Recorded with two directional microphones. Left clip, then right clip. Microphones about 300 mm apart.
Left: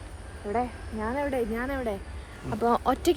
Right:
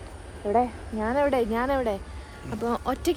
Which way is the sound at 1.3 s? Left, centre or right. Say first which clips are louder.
Right 5 dB; centre.